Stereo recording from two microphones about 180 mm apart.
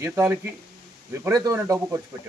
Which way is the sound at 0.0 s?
10° right (ahead or behind).